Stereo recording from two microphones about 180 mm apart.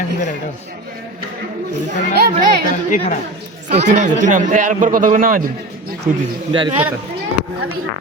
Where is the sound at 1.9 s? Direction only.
60° right (ahead or behind).